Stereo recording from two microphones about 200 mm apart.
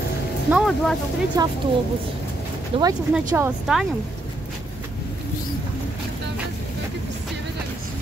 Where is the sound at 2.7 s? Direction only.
25° right (ahead or behind).